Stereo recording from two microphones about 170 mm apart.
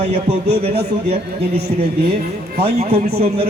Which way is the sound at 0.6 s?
35° right (ahead or behind).